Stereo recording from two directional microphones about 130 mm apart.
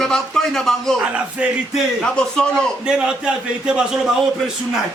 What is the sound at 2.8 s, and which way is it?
A man's voice, 5° right (ahead or behind).